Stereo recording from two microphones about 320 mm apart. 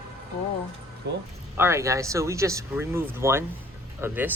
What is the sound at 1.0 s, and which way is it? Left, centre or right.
Speech, right.